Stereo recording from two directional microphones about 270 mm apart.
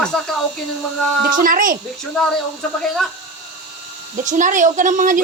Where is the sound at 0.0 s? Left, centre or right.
Centre.